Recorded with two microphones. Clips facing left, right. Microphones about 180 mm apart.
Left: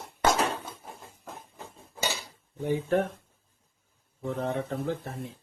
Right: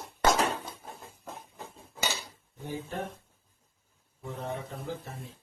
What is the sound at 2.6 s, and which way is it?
Speech, 60° left (ahead or behind).